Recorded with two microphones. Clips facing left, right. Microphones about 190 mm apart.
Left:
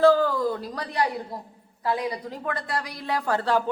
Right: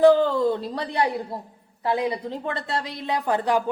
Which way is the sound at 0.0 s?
20° right (ahead or behind).